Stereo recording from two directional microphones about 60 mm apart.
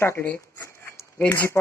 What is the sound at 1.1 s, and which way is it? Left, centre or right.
Speech, left.